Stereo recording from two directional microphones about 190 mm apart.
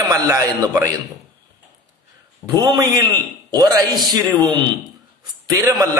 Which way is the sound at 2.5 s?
20° right (ahead or behind).